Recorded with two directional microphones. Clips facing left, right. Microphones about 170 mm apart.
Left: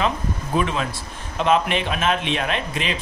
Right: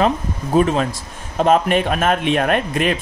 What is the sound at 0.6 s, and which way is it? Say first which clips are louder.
A man's voice: right 7 dB; 40° right (ahead or behind).